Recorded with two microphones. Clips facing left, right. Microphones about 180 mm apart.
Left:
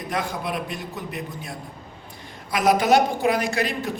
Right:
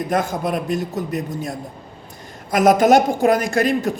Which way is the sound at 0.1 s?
45° right (ahead or behind).